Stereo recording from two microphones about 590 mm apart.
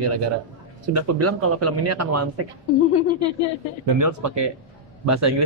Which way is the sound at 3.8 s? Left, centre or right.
Right.